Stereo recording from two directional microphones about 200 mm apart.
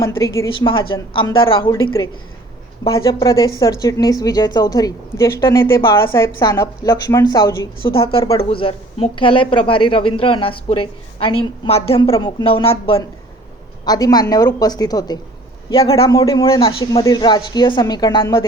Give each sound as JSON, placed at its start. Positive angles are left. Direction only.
{"t": 0.0, "sound": "a woman's voice", "side_deg": 15}
{"t": 0.7, "sound": "speech", "side_deg": 25}
{"t": 2.8, "sound": "a woman's voice", "side_deg": 25}